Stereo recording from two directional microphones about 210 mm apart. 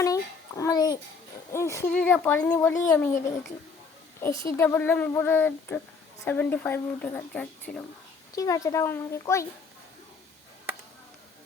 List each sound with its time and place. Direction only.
0.0 s a sound: 15° left (ahead or behind)
1.5 s speech: 15° left (ahead or behind)
4.2 s speech: 15° left (ahead or behind)